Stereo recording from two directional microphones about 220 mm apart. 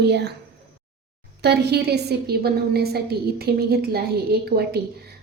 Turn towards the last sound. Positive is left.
turn(degrees=-45)  # may be behind; listen again after turning